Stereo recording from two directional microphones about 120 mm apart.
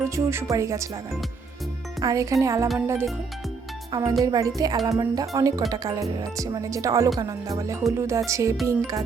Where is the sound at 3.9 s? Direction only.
30° right (ahead or behind).